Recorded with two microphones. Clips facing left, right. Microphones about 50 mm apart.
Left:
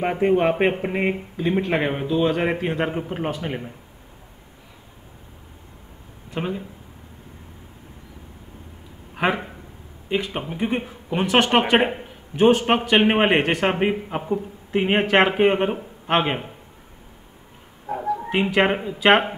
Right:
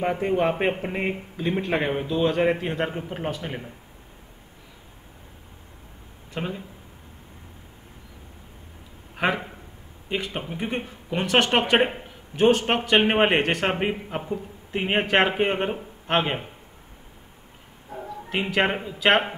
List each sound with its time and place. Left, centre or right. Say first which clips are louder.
0.0 s a man's voice: left 4 dB; centre
1.3 s a man's voice: left 1 dB; centre
6.3 s speech: left 4 dB; centre
9.1 s a man's voice: left 2 dB; centre
17.9 s dog: left 9 dB; left
18.3 s a man's voice: left 3 dB; centre